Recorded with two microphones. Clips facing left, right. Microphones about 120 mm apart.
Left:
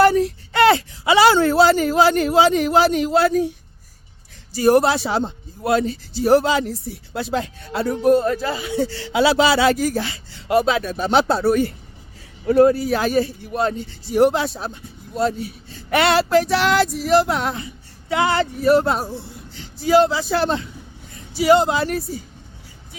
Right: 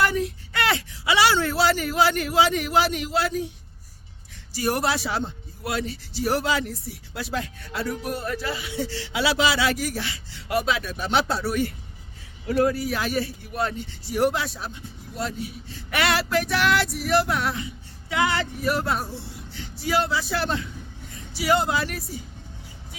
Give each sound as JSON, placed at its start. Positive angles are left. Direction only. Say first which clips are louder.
{"t": 0.0, "sound": "speech", "louder": "left 9 dB", "side_deg": 35}
{"t": 4.5, "sound": "a man's voice", "louder": "left 9 dB", "side_deg": 30}
{"t": 9.1, "sound": "a man's voice", "louder": "left 7 dB", "side_deg": 35}